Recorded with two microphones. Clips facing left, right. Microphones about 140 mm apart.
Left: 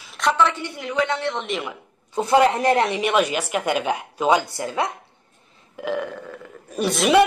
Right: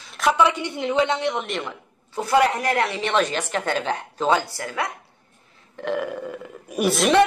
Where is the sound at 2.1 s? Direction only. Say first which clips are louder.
Left 2 dB; 20° left (ahead or behind).